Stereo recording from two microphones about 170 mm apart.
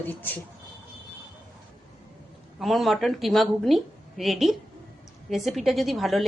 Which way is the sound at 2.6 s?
Centre (ahead or behind).